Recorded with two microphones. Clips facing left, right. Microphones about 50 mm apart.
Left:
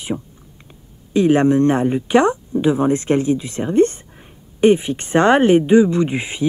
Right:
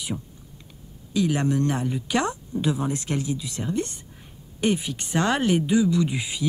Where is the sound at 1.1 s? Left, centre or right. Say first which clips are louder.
Left 10 dB; left.